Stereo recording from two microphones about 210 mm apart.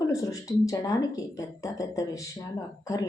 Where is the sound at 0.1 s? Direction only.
15° left (ahead or behind).